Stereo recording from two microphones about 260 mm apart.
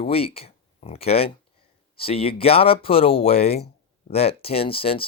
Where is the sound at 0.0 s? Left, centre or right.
Left.